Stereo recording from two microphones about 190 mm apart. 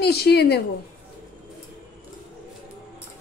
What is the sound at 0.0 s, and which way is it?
Speech, 60° left (ahead or behind).